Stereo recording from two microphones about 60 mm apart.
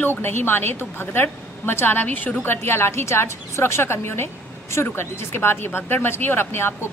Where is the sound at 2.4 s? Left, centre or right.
Left.